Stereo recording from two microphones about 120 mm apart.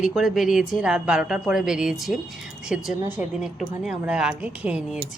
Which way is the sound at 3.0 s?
15° right (ahead or behind).